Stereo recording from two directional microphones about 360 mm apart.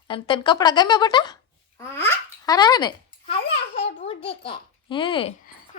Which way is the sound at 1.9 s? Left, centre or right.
Centre.